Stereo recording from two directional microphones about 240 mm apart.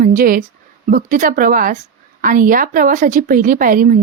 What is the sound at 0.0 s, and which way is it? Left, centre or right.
Speech, right.